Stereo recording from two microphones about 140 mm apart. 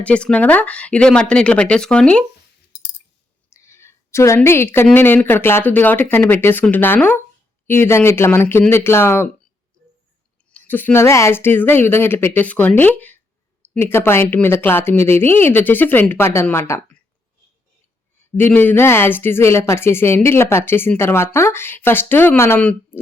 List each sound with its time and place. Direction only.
0.0 s speech: 10° left (ahead or behind)
3.5 s a sound: 20° left (ahead or behind)
4.4 s speech: 15° left (ahead or behind)
10.5 s speech: 15° left (ahead or behind)
18.3 s speech: 15° left (ahead or behind)